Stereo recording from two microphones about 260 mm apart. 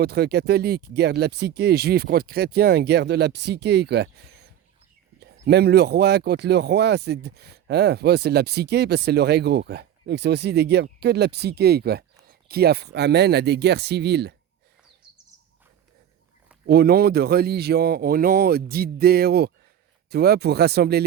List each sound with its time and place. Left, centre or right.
0.0 s speech: right
16.6 s speech: right